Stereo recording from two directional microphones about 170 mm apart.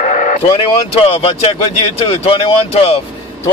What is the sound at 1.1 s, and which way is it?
Speech, 35° left (ahead or behind).